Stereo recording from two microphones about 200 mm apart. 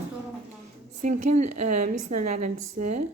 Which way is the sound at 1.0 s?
35° right (ahead or behind).